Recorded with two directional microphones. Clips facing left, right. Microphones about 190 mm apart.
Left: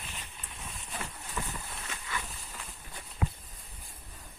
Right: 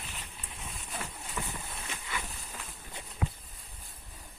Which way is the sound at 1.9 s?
15° right (ahead or behind).